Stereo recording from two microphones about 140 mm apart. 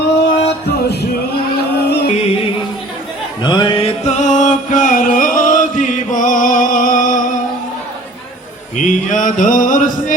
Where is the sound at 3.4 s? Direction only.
30° left (ahead or behind).